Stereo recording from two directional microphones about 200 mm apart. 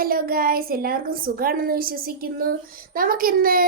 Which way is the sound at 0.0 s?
45° right (ahead or behind).